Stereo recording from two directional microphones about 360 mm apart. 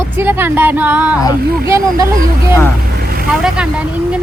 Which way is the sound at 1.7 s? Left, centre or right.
Centre.